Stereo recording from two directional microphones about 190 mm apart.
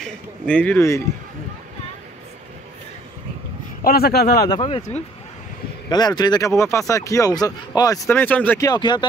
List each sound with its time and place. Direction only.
0.0 s speech: 5° left (ahead or behind)
3.8 s speech: 55° left (ahead or behind)
4.5 s speech: 25° left (ahead or behind)
5.9 s speech: 20° left (ahead or behind)
8.6 s speech: 25° left (ahead or behind)